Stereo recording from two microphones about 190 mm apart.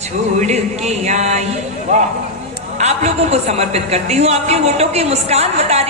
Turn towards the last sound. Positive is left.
turn(degrees=-35)  # may be behind; listen again after turning